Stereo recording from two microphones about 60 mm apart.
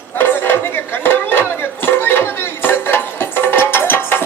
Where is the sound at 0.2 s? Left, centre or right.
Left.